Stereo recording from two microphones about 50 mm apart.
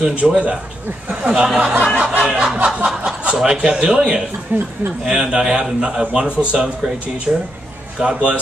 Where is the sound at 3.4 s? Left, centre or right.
Centre.